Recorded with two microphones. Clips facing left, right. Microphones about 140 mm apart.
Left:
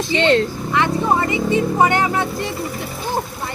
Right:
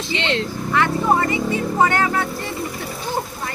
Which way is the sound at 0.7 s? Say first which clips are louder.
Right 1 dB; 20° left (ahead or behind).